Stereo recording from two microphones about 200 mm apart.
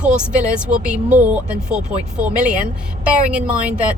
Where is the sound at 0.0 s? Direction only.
5° right (ahead or behind).